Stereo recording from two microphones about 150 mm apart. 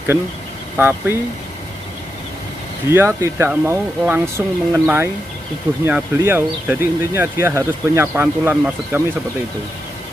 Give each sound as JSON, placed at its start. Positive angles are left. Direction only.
{"t": 0.7, "sound": "speech", "side_deg": -15}
{"t": 2.9, "sound": "speech", "side_deg": -15}